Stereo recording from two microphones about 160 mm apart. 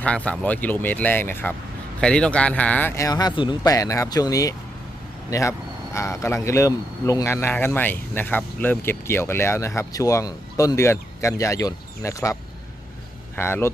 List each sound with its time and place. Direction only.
0.0 s a man's voice: 10° left (ahead or behind)